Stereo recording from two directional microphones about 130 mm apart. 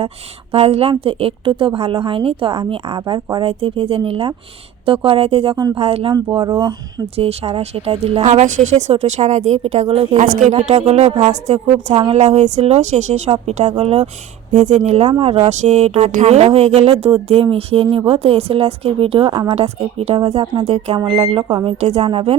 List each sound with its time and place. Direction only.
0.5 s speech: 50° right (ahead or behind)
7.2 s speech: 50° right (ahead or behind); by 10.5 s 70° right (ahead or behind)
10.7 s speech: 55° right (ahead or behind)
14.5 s speech: 60° right (ahead or behind)
20.1 s speech: 40° right (ahead or behind)
20.7 s speech: 50° right (ahead or behind)
21.4 s speech: 35° right (ahead or behind)
21.8 s speech: 55° right (ahead or behind)